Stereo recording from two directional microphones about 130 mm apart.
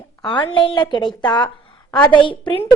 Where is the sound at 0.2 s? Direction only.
35° left (ahead or behind).